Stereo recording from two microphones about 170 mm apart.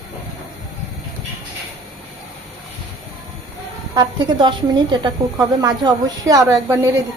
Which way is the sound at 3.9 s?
25° right (ahead or behind).